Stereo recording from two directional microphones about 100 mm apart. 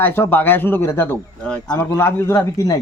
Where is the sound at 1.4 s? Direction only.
10° left (ahead or behind).